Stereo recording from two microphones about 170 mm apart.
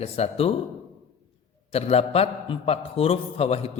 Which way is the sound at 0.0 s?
35° left (ahead or behind).